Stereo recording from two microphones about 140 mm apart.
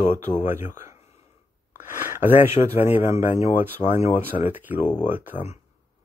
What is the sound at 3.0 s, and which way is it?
Speech, 65° left (ahead or behind).